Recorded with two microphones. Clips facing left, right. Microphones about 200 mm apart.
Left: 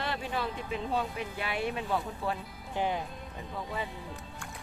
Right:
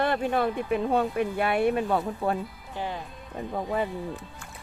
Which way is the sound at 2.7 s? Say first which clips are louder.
Left 2 dB; 20° left (ahead or behind).